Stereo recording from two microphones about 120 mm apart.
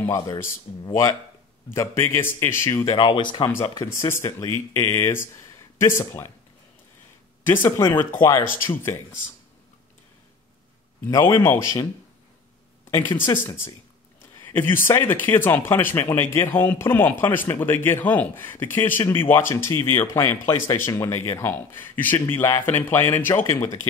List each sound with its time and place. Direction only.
0.0 s speech: 25° left (ahead or behind)
3.0 s speech: 40° left (ahead or behind)
4.0 s speech: 25° left (ahead or behind)
7.4 s speech: 20° left (ahead or behind)
11.1 s speech: 20° left (ahead or behind)
13.3 s speech: 20° left (ahead or behind)